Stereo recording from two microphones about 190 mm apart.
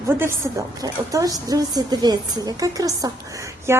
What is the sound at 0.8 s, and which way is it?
A woman's voice, 20° right (ahead or behind).